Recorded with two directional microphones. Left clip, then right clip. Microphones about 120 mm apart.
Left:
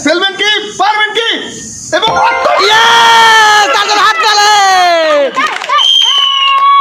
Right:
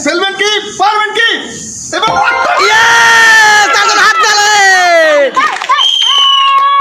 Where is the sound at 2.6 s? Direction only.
20° left (ahead or behind).